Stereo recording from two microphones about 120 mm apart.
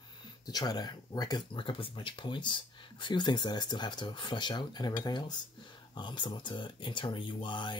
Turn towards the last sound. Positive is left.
turn(degrees=40)  # may be behind; listen again after turning